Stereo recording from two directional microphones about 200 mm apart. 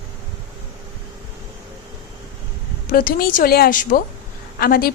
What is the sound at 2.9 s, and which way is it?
A woman's voice, 45° left (ahead or behind).